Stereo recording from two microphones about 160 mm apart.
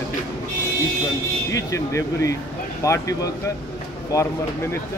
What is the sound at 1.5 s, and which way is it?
Speech, 20° left (ahead or behind).